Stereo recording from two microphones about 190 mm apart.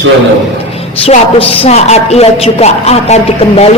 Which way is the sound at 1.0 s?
30° left (ahead or behind).